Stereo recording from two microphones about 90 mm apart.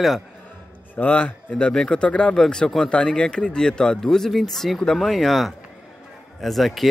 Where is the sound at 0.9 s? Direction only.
15° left (ahead or behind).